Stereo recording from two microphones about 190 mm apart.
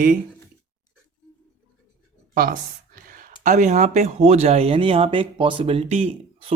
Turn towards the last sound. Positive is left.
turn(degrees=-30)  # may be behind; listen again after turning